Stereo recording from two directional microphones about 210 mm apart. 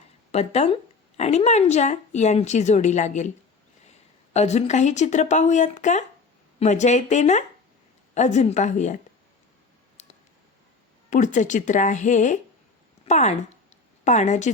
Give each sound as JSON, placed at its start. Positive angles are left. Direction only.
{"t": 0.3, "sound": "speech", "side_deg": 30}
{"t": 4.4, "sound": "speech", "side_deg": 30}
{"t": 10.0, "sound": "a sound", "side_deg": 30}
{"t": 11.1, "sound": "speech", "side_deg": 35}